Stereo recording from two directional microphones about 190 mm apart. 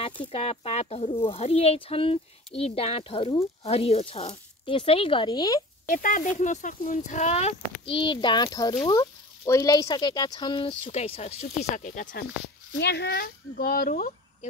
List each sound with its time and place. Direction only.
0.3 s speech: 30° left (ahead or behind)
5.9 s speech: 45° left (ahead or behind)
12.7 s speech: 60° left (ahead or behind); by 14.1 s 45° left (ahead or behind)